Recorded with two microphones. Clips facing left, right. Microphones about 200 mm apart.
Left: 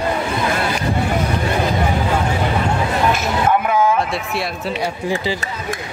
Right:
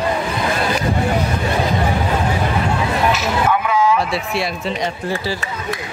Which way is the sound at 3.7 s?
50° left (ahead or behind).